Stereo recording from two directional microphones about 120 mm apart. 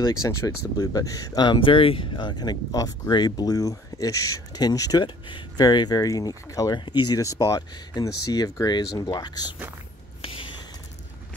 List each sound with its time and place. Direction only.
0.0 s speech: 25° left (ahead or behind)